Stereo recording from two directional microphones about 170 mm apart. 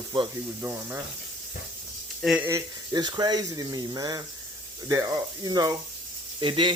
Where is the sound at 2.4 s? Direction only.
20° right (ahead or behind).